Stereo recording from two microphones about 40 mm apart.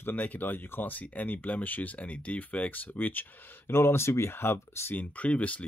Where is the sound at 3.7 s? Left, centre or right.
Left.